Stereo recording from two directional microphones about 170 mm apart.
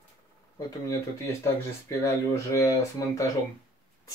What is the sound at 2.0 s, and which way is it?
Speech, 15° left (ahead or behind).